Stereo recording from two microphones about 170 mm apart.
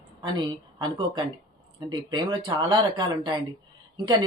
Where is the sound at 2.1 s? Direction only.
25° right (ahead or behind).